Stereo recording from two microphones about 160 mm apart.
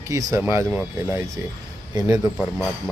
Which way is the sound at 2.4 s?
Centre (ahead or behind).